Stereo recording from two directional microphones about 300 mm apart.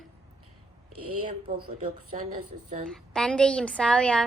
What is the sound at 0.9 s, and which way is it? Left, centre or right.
Speech, right.